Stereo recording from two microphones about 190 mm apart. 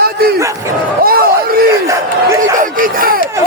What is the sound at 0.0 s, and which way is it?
Dog, 55° right (ahead or behind).